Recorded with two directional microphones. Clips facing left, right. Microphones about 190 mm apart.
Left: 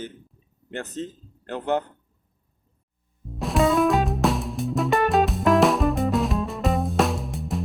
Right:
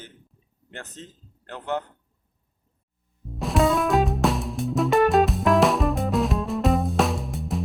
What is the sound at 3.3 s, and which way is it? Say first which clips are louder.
Music: left 1 dB; centre (ahead or behind).